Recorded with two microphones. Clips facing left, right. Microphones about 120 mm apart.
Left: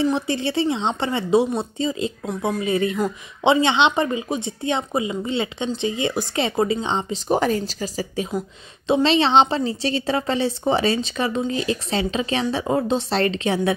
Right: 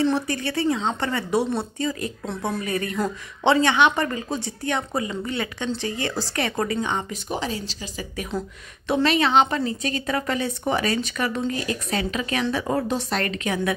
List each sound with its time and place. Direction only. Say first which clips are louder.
0.1 s a woman's voice: left 2 dB; 25° left (ahead or behind)
7.2 s a woman's voice: left 12 dB; 50° left (ahead or behind)
8.8 s a woman's voice: left 3 dB; 25° left (ahead or behind)